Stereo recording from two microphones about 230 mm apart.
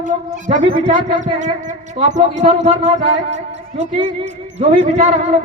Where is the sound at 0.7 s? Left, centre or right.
Right.